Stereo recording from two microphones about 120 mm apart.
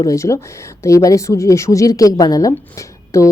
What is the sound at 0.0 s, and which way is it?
A woman's voice, 25° left (ahead or behind).